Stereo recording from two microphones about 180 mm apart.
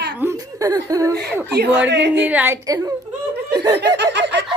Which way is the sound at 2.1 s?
10° right (ahead or behind).